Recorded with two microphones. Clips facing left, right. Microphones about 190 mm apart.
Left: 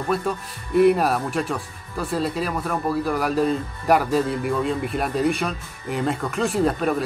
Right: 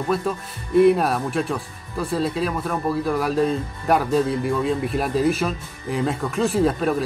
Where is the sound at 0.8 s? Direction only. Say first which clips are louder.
Right 1 dB; centre (ahead or behind).